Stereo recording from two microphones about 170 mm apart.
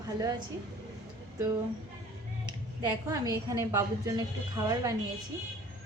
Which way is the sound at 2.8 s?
25° right (ahead or behind).